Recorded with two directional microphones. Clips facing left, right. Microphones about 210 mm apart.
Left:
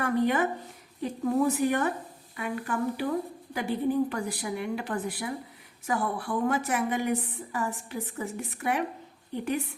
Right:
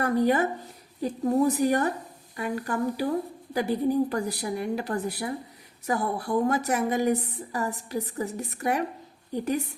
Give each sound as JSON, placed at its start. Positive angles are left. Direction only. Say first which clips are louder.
{"t": 0.0, "sound": "a woman's voice", "louder": "right 2 dB", "side_deg": -35}